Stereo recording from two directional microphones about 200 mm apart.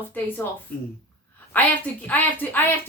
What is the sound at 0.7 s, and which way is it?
Speech, 50° left (ahead or behind).